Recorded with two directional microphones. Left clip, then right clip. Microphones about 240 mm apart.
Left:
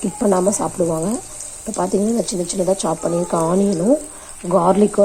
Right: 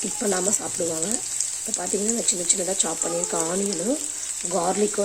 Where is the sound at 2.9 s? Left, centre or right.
Centre.